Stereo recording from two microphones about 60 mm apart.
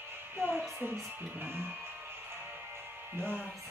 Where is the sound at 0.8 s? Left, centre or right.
Right.